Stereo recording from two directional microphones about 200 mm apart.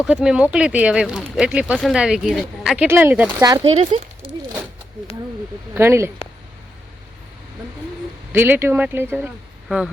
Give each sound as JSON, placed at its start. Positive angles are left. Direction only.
{"t": 0.0, "sound": "speech", "side_deg": 0}
{"t": 3.4, "sound": "speech", "side_deg": -20}
{"t": 3.7, "sound": "speech", "side_deg": -30}
{"t": 5.7, "sound": "speech", "side_deg": -10}
{"t": 8.3, "sound": "speech", "side_deg": -10}